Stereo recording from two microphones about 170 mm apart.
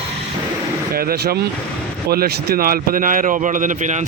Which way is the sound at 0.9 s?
60° right (ahead or behind).